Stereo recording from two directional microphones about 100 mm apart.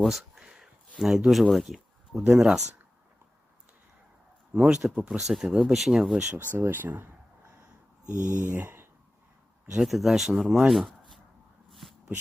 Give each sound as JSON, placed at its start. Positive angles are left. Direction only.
{"t": 0.0, "sound": "a sound", "side_deg": 0}
{"t": 2.3, "sound": "speech", "side_deg": -5}
{"t": 4.5, "sound": "speech", "side_deg": -15}
{"t": 6.6, "sound": "speech", "side_deg": -20}
{"t": 8.4, "sound": "speech", "side_deg": -15}
{"t": 9.7, "sound": "speech", "side_deg": 0}
{"t": 11.7, "sound": "a sound", "side_deg": 0}